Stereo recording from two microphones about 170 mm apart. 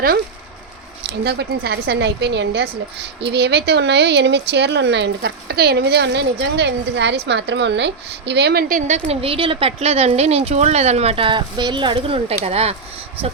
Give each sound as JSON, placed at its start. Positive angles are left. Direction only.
{"t": 1.2, "sound": "a woman's voice", "side_deg": -70}
{"t": 8.7, "sound": "speech", "side_deg": -40}